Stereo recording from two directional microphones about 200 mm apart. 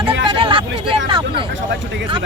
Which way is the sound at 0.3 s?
25° right (ahead or behind).